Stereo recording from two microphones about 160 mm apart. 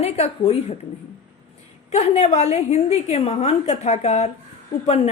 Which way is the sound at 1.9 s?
45° left (ahead or behind).